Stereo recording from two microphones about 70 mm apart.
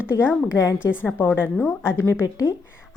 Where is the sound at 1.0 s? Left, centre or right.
Left.